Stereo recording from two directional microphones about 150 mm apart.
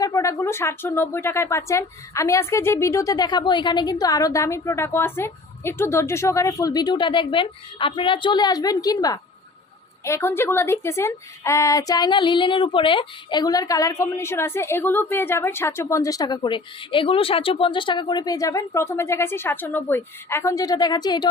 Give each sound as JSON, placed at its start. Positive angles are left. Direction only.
{"t": 0.0, "sound": "speech", "side_deg": 20}